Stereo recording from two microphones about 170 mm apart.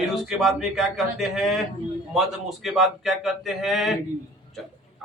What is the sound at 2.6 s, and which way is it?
A man's voice, centre (ahead or behind).